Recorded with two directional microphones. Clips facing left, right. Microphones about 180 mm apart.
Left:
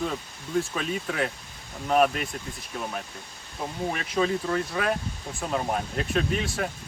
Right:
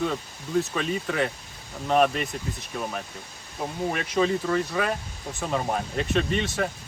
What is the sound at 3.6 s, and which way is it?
Speech, centre (ahead or behind).